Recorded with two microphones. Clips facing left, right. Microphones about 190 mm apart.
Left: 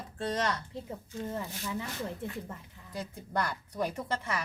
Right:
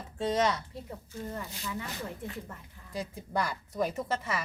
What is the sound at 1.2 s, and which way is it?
Speech, 25° left (ahead or behind).